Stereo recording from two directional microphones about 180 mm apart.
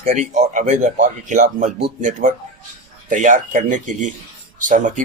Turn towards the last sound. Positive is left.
turn(degrees=-45)  # may be behind; listen again after turning